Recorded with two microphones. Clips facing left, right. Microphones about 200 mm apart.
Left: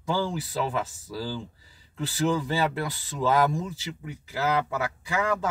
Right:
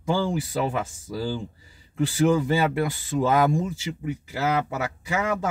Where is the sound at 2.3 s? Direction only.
20° right (ahead or behind).